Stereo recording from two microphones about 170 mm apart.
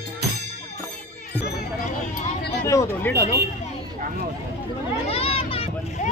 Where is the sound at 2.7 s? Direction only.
15° left (ahead or behind).